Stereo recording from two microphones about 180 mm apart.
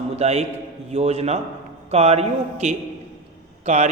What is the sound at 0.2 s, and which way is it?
A man's voice, 35° right (ahead or behind).